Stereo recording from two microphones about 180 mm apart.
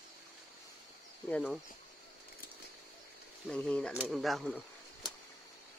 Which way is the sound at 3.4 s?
5° left (ahead or behind).